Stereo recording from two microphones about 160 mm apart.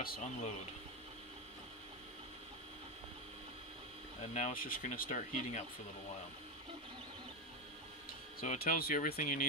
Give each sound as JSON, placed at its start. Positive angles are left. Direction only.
{"t": 0.0, "sound": "speech", "side_deg": 65}
{"t": 4.3, "sound": "speech", "side_deg": 45}
{"t": 4.6, "sound": "speech", "side_deg": 60}
{"t": 8.4, "sound": "speech", "side_deg": 60}